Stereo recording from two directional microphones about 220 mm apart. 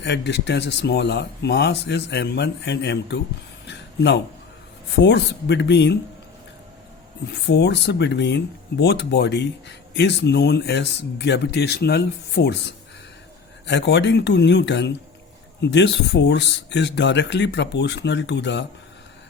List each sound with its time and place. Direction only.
0.0 s speech: 50° left (ahead or behind)
3.7 s a sound: 50° left (ahead or behind)
4.9 s speech: 50° left (ahead or behind)
7.3 s speech: 50° left (ahead or behind)